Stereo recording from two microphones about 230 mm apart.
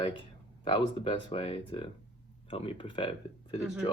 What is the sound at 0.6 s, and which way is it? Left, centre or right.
Speech, left.